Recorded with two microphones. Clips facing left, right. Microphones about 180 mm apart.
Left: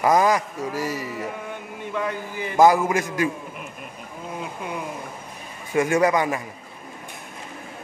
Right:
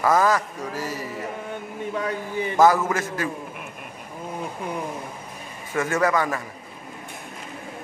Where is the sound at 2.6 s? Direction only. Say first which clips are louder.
Left 2 dB; 15° left (ahead or behind).